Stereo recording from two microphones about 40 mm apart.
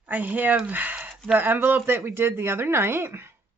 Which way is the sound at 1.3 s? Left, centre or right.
Right.